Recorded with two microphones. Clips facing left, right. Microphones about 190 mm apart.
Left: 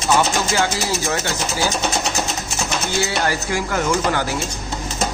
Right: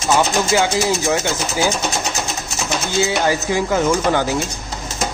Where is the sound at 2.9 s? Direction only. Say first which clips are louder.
Right 4 dB; 15° right (ahead or behind).